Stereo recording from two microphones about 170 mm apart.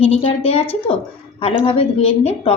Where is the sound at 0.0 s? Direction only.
35° left (ahead or behind).